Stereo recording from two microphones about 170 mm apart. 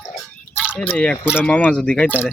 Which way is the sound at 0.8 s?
5° left (ahead or behind).